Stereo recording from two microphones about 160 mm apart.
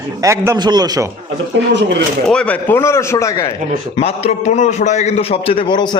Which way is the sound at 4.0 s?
40° left (ahead or behind).